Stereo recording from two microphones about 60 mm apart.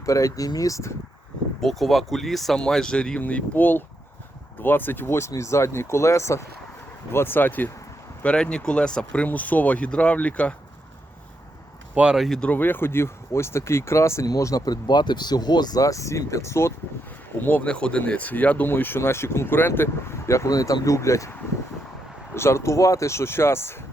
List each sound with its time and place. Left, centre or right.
0.0 s speech: left
1.6 s speech: centre
3.2 s speech: left
7.1 s speech: left
8.2 s speech: centre
9.2 s speech: left
12.1 s speech: centre
12.5 s speech: left
14.3 s speech: left
15.7 s speech: left
17.4 s speech: left
22.4 s speech: left